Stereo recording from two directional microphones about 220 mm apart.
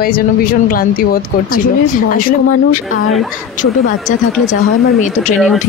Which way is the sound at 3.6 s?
35° left (ahead or behind).